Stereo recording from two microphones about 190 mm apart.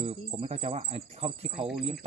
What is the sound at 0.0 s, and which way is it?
Speech, 30° right (ahead or behind).